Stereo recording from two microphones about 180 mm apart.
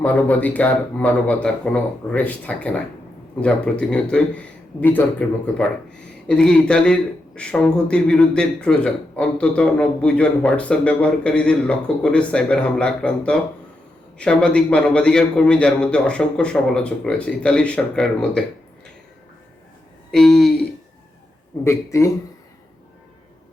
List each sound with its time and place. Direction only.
0.0 s a man's voice: 10° left (ahead or behind)
20.1 s speech: centre (ahead or behind)
21.6 s a man's voice: 15° left (ahead or behind)